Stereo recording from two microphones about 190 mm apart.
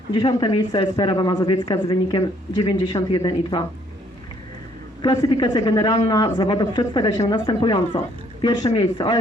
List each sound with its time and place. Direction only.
0.1 s speech: 25° left (ahead or behind)
5.0 s speech: 25° left (ahead or behind)